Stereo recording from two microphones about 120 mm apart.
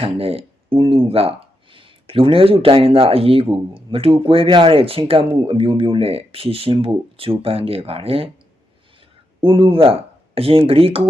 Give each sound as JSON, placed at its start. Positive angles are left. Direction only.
{"t": 0.0, "sound": "speech", "side_deg": -55}
{"t": 9.4, "sound": "speech", "side_deg": -50}